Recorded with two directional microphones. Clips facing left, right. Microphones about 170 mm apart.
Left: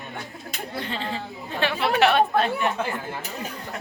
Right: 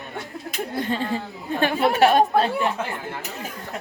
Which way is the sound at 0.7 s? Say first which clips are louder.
Right 5 dB; 45° right (ahead or behind).